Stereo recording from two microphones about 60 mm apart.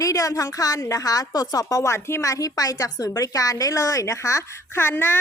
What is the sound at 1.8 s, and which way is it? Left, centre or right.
Speech, left.